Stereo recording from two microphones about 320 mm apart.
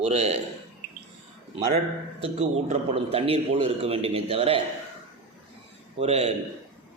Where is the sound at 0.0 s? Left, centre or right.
Centre.